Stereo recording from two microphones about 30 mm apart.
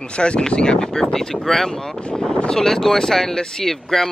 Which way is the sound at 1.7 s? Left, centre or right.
Left.